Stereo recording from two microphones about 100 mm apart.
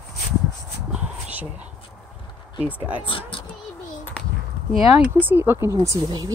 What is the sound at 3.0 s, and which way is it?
Speech, 60° left (ahead or behind).